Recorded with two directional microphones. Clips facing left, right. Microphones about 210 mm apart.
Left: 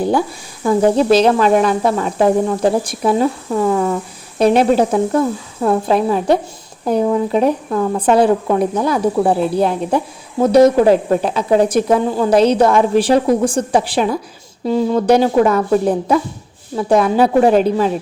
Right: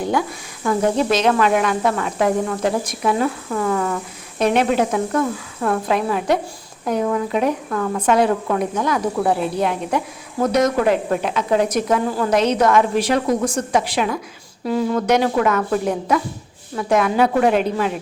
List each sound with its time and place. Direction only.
0.0 s a woman's voice: 30° left (ahead or behind)
3.5 s speech: 20° left (ahead or behind)
4.4 s a woman's voice: 35° left (ahead or behind)